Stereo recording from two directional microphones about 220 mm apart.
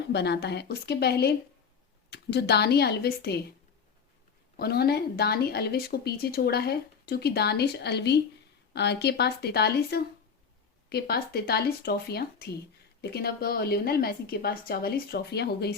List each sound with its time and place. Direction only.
0.1 s speech: 50° left (ahead or behind)
4.5 s speech: 45° left (ahead or behind)